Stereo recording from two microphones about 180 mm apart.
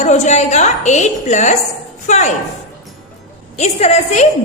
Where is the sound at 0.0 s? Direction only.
40° left (ahead or behind).